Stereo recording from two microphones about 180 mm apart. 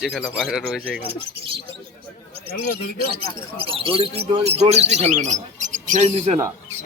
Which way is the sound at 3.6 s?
30° right (ahead or behind).